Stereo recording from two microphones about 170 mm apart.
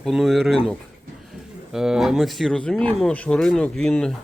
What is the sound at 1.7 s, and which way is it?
Speech, 5° right (ahead or behind).